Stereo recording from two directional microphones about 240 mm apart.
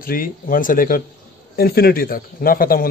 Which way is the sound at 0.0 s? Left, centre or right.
Left.